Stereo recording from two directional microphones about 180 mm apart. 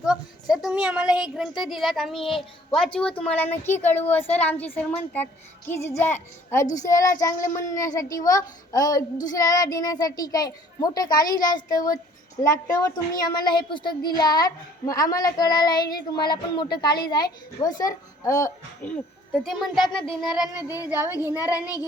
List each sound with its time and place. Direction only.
0.0 s a woman's voice: 5° right (ahead or behind); by 18.5 s 15° left (ahead or behind)
18.9 s a child's voice: centre (ahead or behind)
19.9 s child singing: 5° left (ahead or behind)
20.9 s speech: 10° right (ahead or behind)
21.3 s a woman's voice: 20° left (ahead or behind)